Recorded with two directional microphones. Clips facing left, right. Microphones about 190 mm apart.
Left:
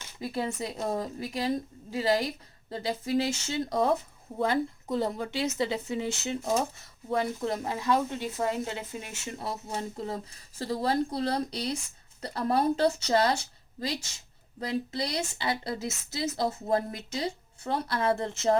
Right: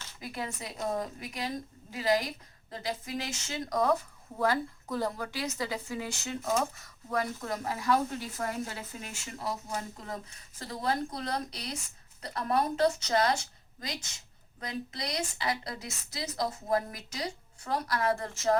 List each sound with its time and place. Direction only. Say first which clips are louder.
0.2 s a woman's voice: left 7 dB; 30° left (ahead or behind)